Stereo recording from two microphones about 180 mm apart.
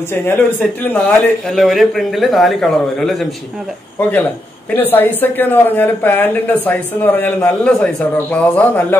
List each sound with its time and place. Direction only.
0.1 s a man's voice: 10° left (ahead or behind)
4.6 s speech: 10° left (ahead or behind)